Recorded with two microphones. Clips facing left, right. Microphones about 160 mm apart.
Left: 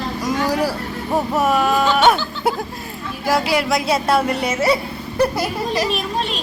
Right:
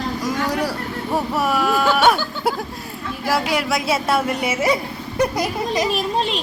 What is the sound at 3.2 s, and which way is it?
Speech, 5° left (ahead or behind).